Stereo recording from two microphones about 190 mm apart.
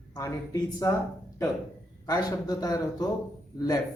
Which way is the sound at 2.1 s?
20° left (ahead or behind).